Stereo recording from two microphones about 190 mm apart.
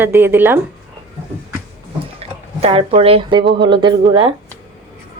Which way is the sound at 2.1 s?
30° right (ahead or behind).